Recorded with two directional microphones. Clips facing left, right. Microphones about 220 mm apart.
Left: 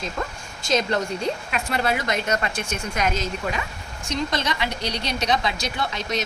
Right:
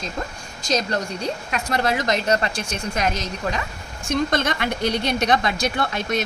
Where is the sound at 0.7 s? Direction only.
40° right (ahead or behind).